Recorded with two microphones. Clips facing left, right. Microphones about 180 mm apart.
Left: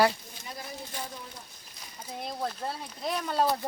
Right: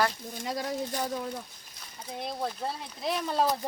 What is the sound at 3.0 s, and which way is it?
Speech, centre (ahead or behind).